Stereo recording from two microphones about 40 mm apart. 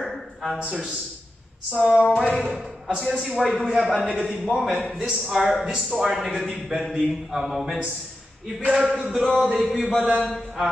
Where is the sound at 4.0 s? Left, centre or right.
Centre.